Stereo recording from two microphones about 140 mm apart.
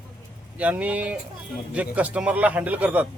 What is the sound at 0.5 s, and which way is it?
A man's voice, 10° right (ahead or behind).